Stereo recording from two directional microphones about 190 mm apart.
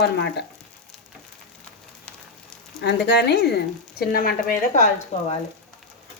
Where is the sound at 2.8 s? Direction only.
60° left (ahead or behind).